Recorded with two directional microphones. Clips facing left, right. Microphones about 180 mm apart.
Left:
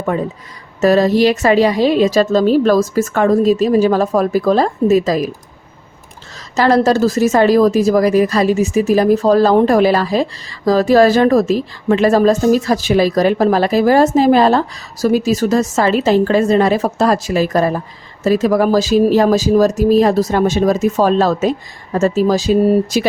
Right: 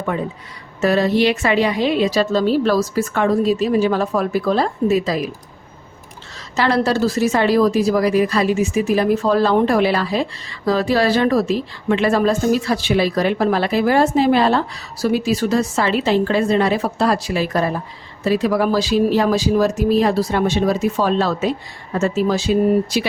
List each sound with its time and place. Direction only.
0.8 s a woman's voice: 40° left (ahead or behind)
6.6 s a woman's voice: 40° left (ahead or behind)